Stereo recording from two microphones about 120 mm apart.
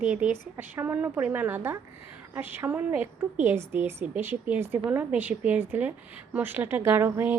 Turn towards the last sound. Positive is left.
turn(degrees=-15)  # may be behind; listen again after turning